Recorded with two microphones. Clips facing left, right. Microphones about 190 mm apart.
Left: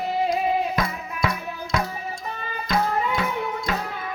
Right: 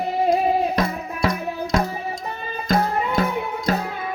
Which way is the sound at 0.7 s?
35° right (ahead or behind).